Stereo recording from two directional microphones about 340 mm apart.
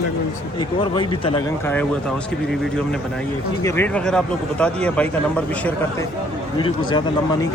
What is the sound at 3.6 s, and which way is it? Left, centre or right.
Speech, centre.